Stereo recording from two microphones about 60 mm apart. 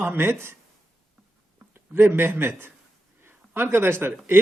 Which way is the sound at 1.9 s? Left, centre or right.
Right.